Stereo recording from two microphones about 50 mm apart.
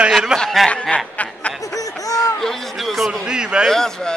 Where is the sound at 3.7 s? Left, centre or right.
Centre.